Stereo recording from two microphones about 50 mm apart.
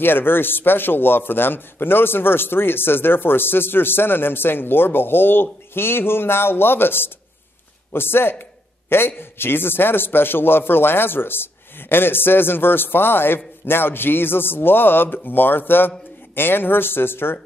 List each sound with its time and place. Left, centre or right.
0.0 s a man's voice: left